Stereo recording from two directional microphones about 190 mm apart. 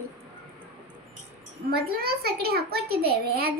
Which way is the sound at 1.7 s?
55° right (ahead or behind).